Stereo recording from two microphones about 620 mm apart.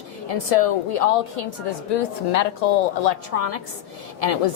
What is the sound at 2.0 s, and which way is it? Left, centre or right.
A woman's voice, left.